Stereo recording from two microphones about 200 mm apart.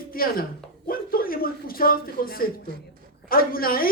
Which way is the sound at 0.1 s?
45° left (ahead or behind).